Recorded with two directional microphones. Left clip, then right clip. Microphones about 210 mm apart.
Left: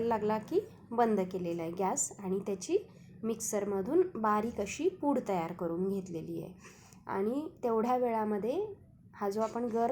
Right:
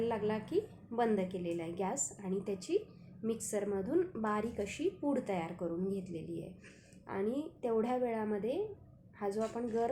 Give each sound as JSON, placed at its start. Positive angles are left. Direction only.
{"t": 0.0, "sound": "a woman's voice", "side_deg": 20}